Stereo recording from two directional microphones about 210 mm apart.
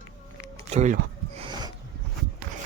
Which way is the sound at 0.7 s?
30° right (ahead or behind).